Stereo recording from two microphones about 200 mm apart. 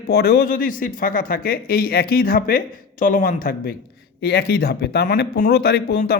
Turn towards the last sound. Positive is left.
turn(degrees=50)  # may be behind; listen again after turning